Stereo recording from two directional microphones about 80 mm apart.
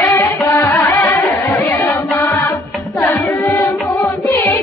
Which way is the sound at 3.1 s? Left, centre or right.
Left.